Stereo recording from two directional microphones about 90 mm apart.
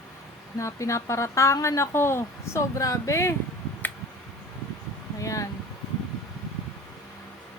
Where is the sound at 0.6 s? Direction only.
35° left (ahead or behind).